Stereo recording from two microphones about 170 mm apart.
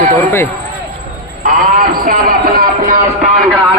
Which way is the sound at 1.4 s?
55° right (ahead or behind).